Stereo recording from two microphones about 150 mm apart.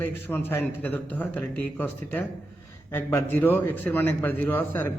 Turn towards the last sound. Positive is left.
turn(degrees=15)  # may be behind; listen again after turning